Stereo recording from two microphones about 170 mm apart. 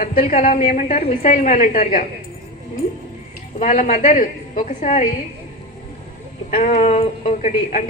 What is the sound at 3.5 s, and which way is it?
A woman's voice, 50° left (ahead or behind).